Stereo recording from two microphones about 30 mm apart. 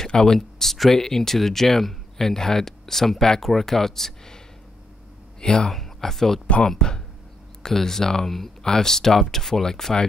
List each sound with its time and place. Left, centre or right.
0.0 s speech: left
5.4 s speech: left
5.7 s speech: centre
6.8 s speech: left